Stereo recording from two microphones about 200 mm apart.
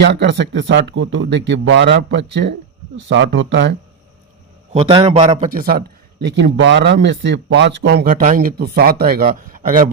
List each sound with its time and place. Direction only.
0.0 s speech: 60° right (ahead or behind)
4.7 s a man's voice: 30° right (ahead or behind)
5.5 s speech: 50° right (ahead or behind)
8.0 s speech: 40° right (ahead or behind)